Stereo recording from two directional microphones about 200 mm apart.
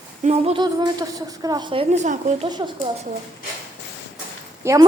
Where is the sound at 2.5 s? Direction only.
20° right (ahead or behind).